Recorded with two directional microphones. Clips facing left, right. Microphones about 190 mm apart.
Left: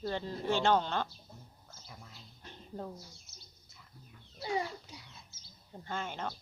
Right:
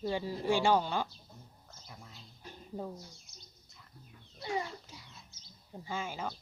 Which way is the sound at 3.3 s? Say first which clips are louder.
Right 1 dB; centre (ahead or behind).